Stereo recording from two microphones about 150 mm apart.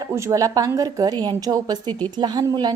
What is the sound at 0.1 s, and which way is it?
A woman's voice, 20° right (ahead or behind).